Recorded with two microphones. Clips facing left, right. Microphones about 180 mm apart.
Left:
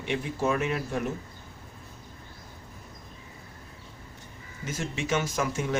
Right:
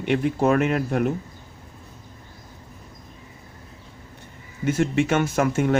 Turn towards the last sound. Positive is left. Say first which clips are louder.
# right 8 dB
turn(degrees=-60)  # may be behind; listen again after turning